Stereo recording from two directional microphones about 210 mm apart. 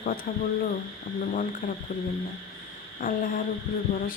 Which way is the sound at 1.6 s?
40° left (ahead or behind).